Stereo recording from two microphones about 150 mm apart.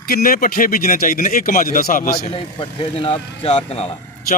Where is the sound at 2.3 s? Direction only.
35° left (ahead or behind).